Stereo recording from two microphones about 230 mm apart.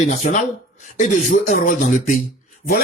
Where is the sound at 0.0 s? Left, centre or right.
Left.